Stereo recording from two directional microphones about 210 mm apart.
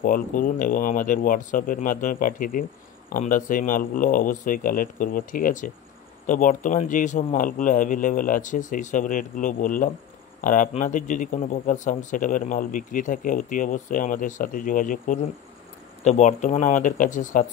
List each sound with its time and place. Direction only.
0.0 s speech: 40° left (ahead or behind)